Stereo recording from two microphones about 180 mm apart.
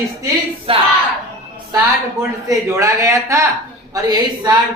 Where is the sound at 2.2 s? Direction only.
15° right (ahead or behind).